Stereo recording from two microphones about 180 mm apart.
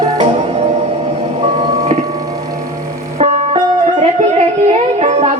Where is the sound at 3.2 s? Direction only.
35° right (ahead or behind).